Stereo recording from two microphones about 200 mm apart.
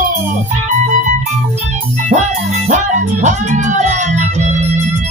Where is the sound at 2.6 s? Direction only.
35° right (ahead or behind).